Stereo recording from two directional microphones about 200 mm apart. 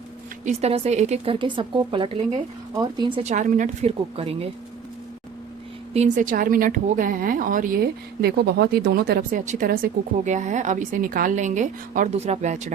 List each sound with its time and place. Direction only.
0.4 s a woman's voice: 35° right (ahead or behind)
3.2 s a woman's voice: 40° right (ahead or behind)
5.9 s a woman's voice: 35° right (ahead or behind)